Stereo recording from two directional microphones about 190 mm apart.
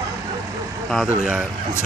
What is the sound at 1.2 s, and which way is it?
Speech, 5° right (ahead or behind).